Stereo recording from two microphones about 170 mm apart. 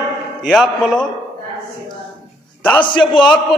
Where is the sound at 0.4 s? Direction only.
5° left (ahead or behind).